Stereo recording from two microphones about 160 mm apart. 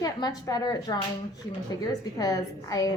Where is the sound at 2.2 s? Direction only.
25° left (ahead or behind).